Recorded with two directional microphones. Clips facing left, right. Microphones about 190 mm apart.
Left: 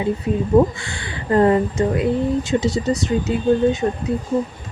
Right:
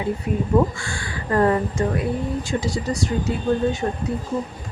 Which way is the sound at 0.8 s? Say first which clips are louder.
Even; 20° left (ahead or behind).